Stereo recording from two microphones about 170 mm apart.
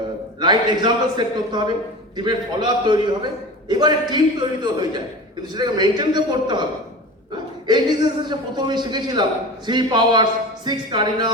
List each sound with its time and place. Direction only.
0.3 s a man's voice: 25° right (ahead or behind)
7.7 s a man's voice: 25° right (ahead or behind)